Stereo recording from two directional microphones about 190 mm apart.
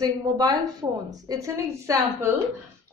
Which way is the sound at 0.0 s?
20° right (ahead or behind).